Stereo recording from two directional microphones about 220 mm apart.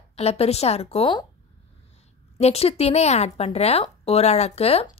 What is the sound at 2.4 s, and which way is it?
A woman's voice, 30° left (ahead or behind).